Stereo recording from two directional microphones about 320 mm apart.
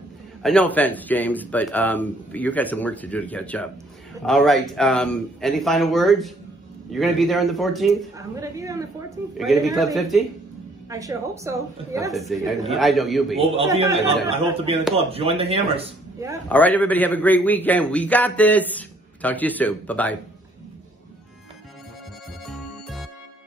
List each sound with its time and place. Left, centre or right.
0.4 s a man's voice: centre
8.4 s a woman's voice: centre
9.4 s a man's voice: centre
13.4 s a woman's voice: centre
16.4 s a man's voice: centre
22.4 s music: centre